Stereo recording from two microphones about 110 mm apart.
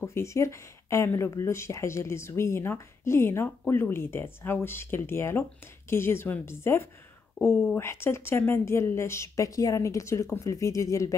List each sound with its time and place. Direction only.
0.0 s speech: 25° left (ahead or behind)